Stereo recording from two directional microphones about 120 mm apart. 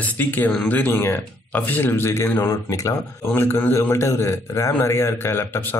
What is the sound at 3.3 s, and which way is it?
Speech, 15° left (ahead or behind).